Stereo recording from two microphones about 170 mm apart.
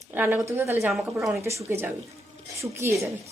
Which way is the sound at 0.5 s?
10° right (ahead or behind).